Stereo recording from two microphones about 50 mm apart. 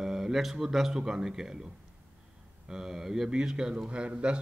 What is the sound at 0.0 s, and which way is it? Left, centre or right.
Speech, centre.